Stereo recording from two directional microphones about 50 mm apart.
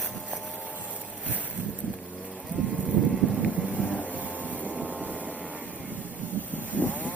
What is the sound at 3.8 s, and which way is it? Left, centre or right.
Vehicle, left.